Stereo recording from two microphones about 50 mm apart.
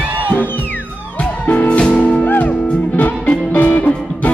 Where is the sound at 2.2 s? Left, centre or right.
Left.